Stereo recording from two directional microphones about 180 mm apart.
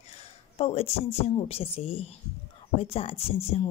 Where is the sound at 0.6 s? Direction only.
35° left (ahead or behind).